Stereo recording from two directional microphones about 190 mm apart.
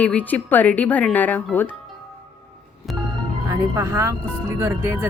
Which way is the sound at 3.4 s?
20° right (ahead or behind).